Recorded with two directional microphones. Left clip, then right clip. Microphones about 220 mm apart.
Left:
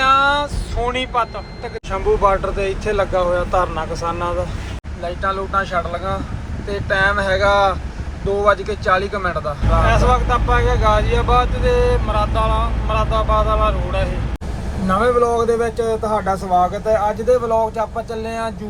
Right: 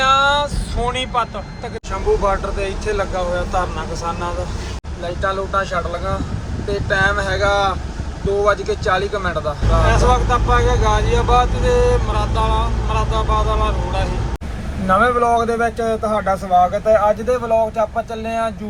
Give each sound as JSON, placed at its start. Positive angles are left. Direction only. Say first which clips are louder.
{"t": 0.0, "sound": "vehicle", "louder": "even", "side_deg": -5}
{"t": 1.9, "sound": "speech", "louder": "left 2 dB", "side_deg": -5}
{"t": 15.6, "sound": "speech", "louder": "right 1 dB", "side_deg": 15}
{"t": 17.3, "sound": "speech", "louder": "even", "side_deg": -5}
{"t": 18.1, "sound": "speech", "louder": "right 2 dB", "side_deg": 10}